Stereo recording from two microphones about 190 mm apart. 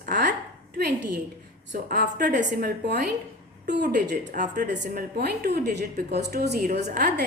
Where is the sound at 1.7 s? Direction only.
45° right (ahead or behind).